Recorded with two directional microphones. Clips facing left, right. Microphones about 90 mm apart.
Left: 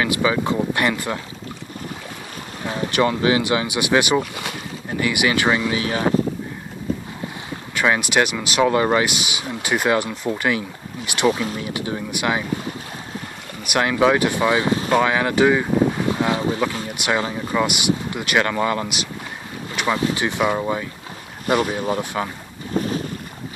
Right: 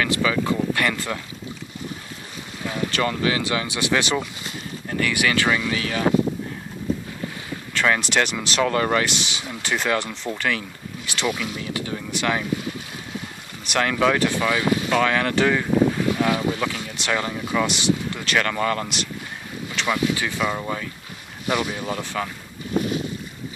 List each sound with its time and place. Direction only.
0.0 s speech: 20° left (ahead or behind)
2.9 s speech: 15° left (ahead or behind)
7.7 s speech: 15° left (ahead or behind)
11.2 s speech: 35° left (ahead or behind)
11.7 s speech: 10° left (ahead or behind)
13.7 s speech: 15° left (ahead or behind)
16.9 s speech: 15° left (ahead or behind)
19.9 s speech: 20° left (ahead or behind)
21.5 s speech: 40° left (ahead or behind)
22.2 s speech: 25° left (ahead or behind)